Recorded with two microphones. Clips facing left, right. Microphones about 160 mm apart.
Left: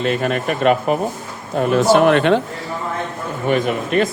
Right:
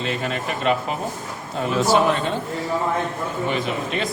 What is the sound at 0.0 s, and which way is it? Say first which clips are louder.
Speech: left 7 dB; 55° left (ahead or behind).